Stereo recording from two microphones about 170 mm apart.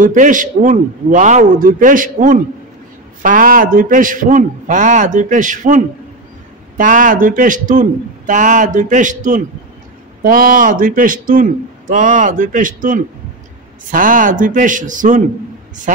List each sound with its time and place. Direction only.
0.0 s a man's voice: 50° right (ahead or behind)